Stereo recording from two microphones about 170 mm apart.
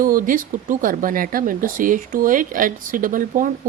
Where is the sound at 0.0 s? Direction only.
55° right (ahead or behind).